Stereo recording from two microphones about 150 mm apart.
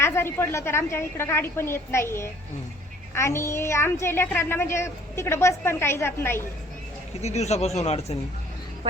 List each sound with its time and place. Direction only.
0.0 s a woman's voice: 15° left (ahead or behind)
7.2 s speech: 45° left (ahead or behind)